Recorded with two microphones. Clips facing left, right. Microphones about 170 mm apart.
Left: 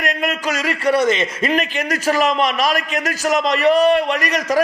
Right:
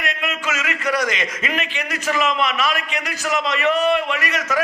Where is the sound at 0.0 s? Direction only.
40° left (ahead or behind).